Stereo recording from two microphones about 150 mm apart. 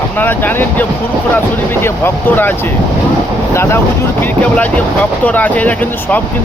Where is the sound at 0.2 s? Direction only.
10° left (ahead or behind).